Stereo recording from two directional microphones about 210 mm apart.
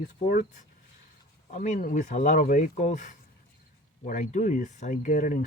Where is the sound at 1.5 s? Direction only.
35° left (ahead or behind).